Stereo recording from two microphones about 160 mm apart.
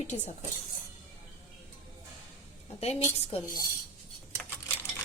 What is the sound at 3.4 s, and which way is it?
Cutlery, 65° left (ahead or behind).